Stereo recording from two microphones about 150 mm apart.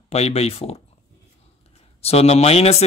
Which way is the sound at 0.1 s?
45° left (ahead or behind).